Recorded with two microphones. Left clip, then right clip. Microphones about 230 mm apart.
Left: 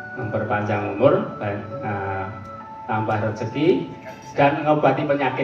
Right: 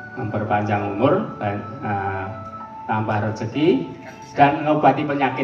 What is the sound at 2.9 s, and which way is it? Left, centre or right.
Speech, right.